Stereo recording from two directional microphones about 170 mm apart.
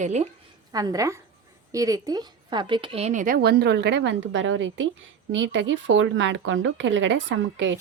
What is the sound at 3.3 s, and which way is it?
Speech, 75° right (ahead or behind).